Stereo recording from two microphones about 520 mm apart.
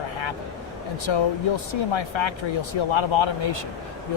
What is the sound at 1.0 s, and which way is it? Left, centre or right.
Speech, left.